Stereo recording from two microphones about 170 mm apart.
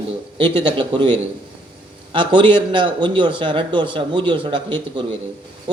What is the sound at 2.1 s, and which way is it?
A man's voice, 30° right (ahead or behind).